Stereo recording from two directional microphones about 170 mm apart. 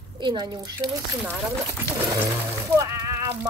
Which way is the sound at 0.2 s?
25° right (ahead or behind).